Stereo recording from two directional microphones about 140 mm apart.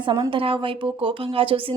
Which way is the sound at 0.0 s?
35° right (ahead or behind).